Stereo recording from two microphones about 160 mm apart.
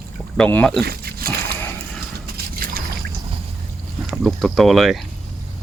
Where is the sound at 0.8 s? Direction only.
75° right (ahead or behind).